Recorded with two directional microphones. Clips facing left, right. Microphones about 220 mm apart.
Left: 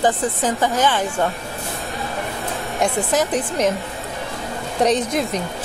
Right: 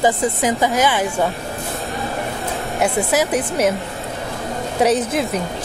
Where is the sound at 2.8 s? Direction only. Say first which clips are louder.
Right 1 dB; 10° right (ahead or behind).